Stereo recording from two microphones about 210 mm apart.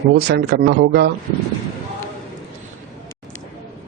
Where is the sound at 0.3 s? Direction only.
50° right (ahead or behind).